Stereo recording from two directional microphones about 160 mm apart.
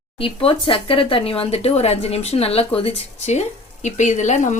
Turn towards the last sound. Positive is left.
turn(degrees=50)  # may be behind; listen again after turning